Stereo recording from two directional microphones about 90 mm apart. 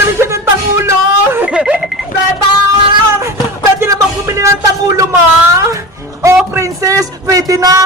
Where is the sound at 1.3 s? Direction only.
15° right (ahead or behind).